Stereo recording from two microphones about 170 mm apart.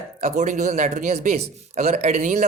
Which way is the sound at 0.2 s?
45° right (ahead or behind).